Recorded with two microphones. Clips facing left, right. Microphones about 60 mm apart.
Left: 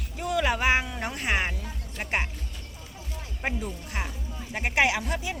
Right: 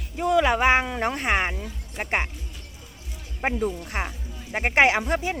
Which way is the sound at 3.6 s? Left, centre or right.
Right.